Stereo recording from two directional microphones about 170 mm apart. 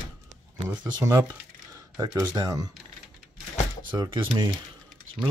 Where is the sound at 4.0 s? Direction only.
25° right (ahead or behind).